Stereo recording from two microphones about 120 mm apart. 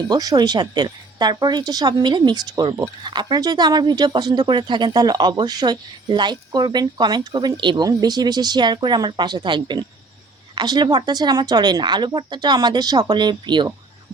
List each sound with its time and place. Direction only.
0.1 s speech: 35° right (ahead or behind)